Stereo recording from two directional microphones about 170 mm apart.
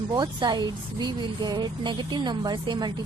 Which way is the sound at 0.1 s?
25° right (ahead or behind).